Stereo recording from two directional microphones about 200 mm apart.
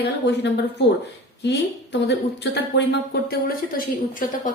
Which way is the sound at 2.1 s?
60° left (ahead or behind).